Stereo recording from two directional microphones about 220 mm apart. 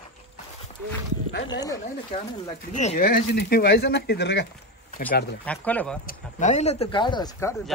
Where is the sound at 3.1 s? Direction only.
45° left (ahead or behind).